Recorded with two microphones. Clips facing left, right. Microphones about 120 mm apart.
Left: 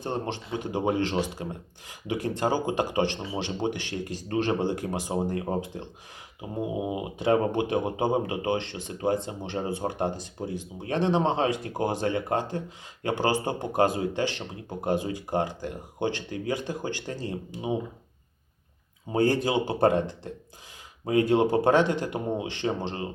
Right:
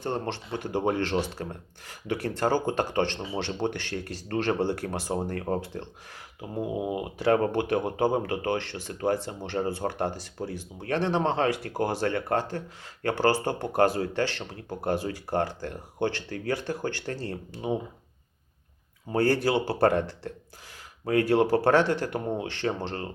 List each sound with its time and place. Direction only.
0.0 s speech: 15° left (ahead or behind)
19.1 s speech: 20° left (ahead or behind)